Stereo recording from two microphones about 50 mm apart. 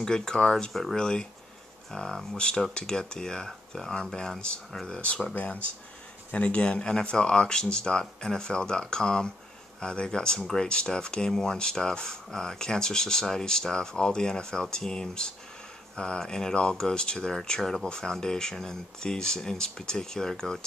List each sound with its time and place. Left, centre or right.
0.0 s speech: centre